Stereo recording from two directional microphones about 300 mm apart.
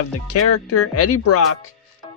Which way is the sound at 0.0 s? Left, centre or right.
Left.